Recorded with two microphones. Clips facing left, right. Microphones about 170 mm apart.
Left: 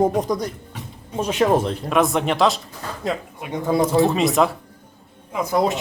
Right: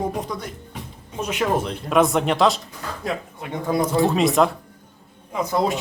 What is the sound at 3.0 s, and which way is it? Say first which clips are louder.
Speech: left 2 dB; 20° left (ahead or behind).